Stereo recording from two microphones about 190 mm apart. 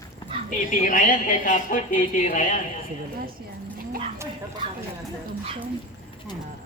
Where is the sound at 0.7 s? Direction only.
45° left (ahead or behind).